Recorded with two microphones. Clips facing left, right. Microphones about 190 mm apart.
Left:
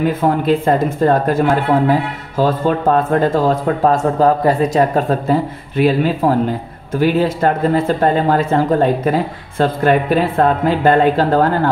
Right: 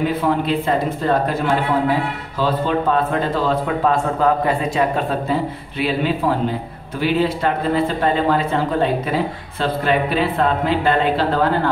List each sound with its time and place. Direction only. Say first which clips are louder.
0.2 s a man's voice: left 4 dB; 45° left (ahead or behind)